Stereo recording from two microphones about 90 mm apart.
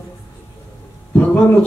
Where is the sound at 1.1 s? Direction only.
15° left (ahead or behind).